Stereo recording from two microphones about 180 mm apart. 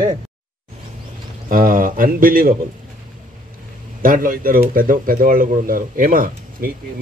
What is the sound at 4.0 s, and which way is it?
A man's voice, 50° right (ahead or behind).